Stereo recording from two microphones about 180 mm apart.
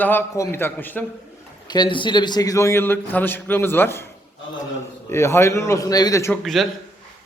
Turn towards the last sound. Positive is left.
turn(degrees=0)  # may be behind; listen again after turning